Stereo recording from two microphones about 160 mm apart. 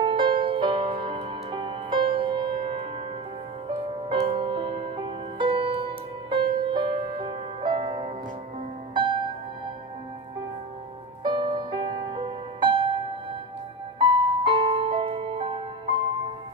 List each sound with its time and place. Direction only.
0.0 s music: 30° right (ahead or behind)
4.1 s music: 35° right (ahead or behind)
11.2 s music: 30° right (ahead or behind)
13.9 s music: 35° right (ahead or behind)